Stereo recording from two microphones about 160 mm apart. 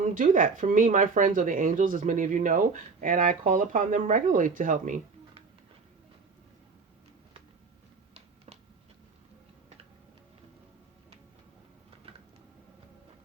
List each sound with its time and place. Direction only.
0.0 s speech: 55° right (ahead or behind)